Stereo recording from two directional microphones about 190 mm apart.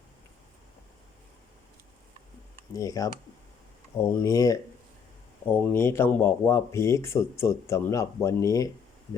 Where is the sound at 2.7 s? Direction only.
20° left (ahead or behind).